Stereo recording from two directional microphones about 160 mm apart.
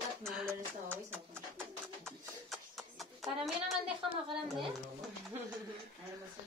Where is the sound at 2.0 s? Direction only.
Centre (ahead or behind).